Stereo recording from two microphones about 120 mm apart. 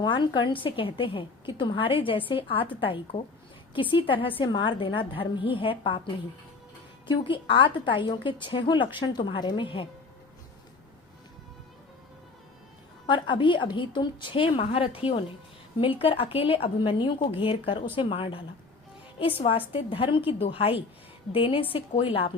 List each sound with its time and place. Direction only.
0.0 s a woman's voice: 40° left (ahead or behind)
7.1 s a woman's voice: 45° left (ahead or behind)
13.1 s a woman's voice: 40° left (ahead or behind)